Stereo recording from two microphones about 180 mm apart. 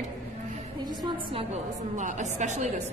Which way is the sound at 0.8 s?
25° right (ahead or behind).